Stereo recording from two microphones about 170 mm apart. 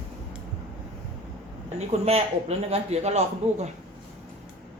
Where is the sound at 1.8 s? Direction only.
40° right (ahead or behind).